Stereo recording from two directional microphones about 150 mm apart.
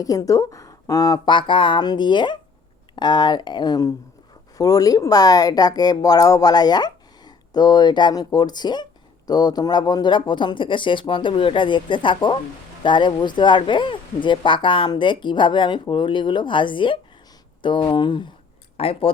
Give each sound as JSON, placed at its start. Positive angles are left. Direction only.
{"t": 0.0, "sound": "speech", "side_deg": 25}